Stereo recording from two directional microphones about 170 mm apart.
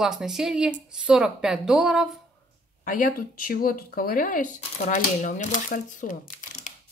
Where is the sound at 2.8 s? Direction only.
55° left (ahead or behind).